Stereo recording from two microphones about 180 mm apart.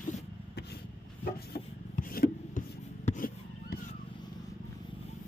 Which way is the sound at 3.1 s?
50° left (ahead or behind).